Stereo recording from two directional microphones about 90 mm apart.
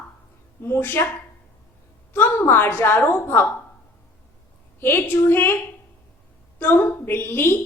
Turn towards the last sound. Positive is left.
turn(degrees=25)  # may be behind; listen again after turning